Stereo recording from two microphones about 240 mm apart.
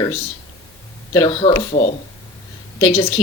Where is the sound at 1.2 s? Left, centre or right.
Left.